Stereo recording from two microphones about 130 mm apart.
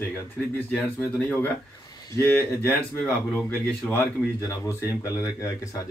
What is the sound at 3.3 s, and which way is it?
Speech, 5° left (ahead or behind).